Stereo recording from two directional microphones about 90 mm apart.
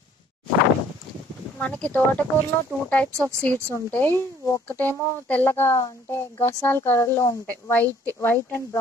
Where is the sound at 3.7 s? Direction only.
25° left (ahead or behind).